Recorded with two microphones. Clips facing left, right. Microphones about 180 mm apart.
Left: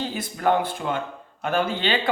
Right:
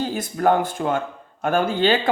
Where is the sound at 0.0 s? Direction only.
45° right (ahead or behind).